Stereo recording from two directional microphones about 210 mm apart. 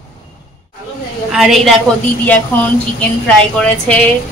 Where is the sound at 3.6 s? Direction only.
5° left (ahead or behind).